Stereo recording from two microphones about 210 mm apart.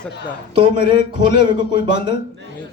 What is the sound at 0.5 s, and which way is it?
Speech, 25° right (ahead or behind).